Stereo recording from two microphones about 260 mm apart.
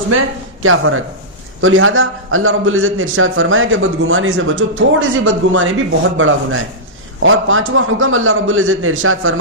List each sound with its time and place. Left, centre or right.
0.6 s a man's voice: right